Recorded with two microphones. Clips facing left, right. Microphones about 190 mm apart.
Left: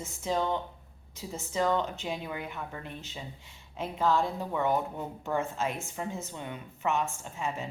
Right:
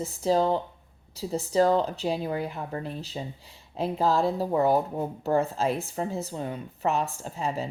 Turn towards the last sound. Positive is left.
turn(degrees=-35)  # may be behind; listen again after turning